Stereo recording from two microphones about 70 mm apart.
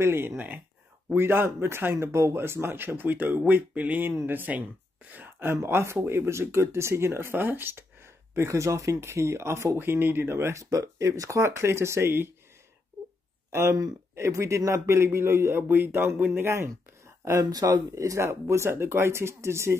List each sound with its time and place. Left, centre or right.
0.0 s speech: right
8.4 s speech: right
9.8 s speech: right
13.5 s speech: right
17.4 s speech: right